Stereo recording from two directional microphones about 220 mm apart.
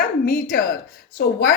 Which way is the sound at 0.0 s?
40° left (ahead or behind).